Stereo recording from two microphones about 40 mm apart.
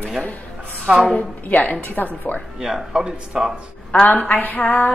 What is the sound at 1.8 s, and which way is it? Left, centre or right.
Speech, left.